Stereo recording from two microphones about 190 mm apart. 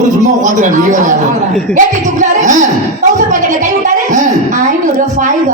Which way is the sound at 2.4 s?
40° right (ahead or behind).